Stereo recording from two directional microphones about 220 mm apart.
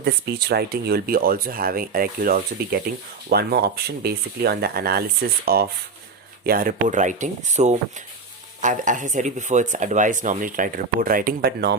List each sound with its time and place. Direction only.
0.0 s speech: 45° right (ahead or behind)